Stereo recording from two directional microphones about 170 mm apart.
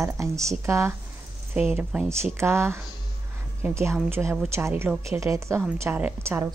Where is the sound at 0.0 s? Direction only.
20° right (ahead or behind).